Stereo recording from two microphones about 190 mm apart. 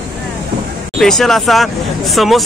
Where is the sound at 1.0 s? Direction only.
Centre (ahead or behind).